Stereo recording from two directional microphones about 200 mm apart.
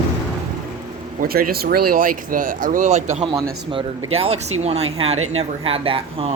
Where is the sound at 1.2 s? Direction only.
50° right (ahead or behind); by 3.3 s 35° right (ahead or behind).